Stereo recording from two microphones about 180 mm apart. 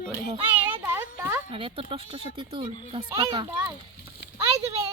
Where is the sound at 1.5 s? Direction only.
30° right (ahead or behind).